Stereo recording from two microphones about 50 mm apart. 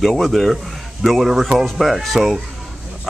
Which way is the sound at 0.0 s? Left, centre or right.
Centre.